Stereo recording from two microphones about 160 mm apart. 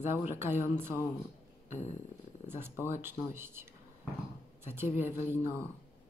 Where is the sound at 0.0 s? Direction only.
15° right (ahead or behind).